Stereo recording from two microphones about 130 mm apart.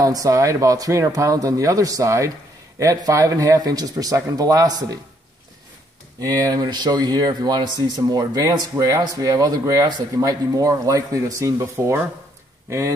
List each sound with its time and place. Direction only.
0.0 s speech: 25° right (ahead or behind)
6.2 s speech: 30° right (ahead or behind)